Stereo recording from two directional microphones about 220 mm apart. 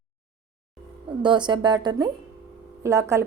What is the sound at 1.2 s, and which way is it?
A woman's voice, 20° right (ahead or behind).